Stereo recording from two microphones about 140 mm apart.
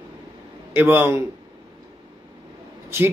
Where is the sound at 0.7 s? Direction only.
15° right (ahead or behind).